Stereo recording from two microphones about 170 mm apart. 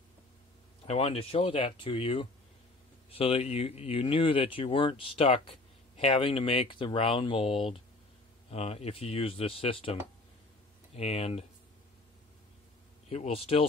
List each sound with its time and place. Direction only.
0.8 s speech: 35° left (ahead or behind)
11.0 s speech: 40° left (ahead or behind)
13.1 s speech: 35° left (ahead or behind)